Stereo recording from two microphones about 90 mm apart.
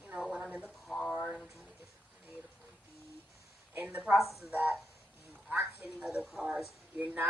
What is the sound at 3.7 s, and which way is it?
A woman's voice, 15° right (ahead or behind).